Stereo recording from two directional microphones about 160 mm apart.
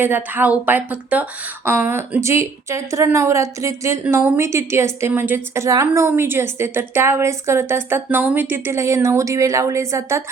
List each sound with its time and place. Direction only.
0.0 s a woman's voice: 10° right (ahead or behind)